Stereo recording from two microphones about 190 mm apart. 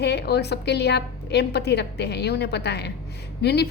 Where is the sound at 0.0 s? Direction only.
60° left (ahead or behind).